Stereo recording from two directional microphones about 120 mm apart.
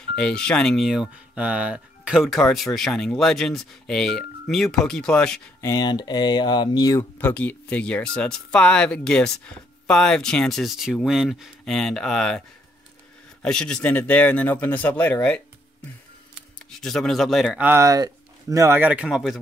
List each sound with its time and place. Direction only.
0.1 s speech: 5° left (ahead or behind)
5.6 s speech: 30° left (ahead or behind)
7.0 s speech: 15° left (ahead or behind)
16.8 s speech: 5° left (ahead or behind)
17.6 s speech: 15° right (ahead or behind)
17.8 s speech: 30° right (ahead or behind)
18.8 s speech: 10° right (ahead or behind)
19.0 s speech: centre (ahead or behind)